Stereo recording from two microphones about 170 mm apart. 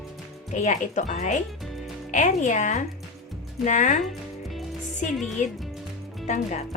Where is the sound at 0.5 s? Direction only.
45° left (ahead or behind).